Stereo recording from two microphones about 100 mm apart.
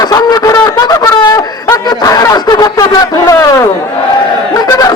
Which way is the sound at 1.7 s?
40° left (ahead or behind).